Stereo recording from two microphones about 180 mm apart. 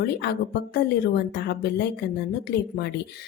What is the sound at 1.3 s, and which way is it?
Speech, 65° left (ahead or behind).